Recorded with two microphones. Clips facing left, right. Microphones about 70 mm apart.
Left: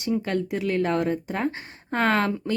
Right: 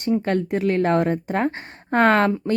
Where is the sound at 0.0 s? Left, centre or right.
Right.